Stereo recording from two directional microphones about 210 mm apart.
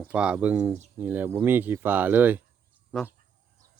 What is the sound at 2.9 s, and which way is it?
Speech, centre (ahead or behind).